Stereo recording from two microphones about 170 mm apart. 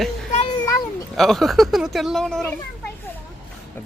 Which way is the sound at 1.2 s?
Centre (ahead or behind).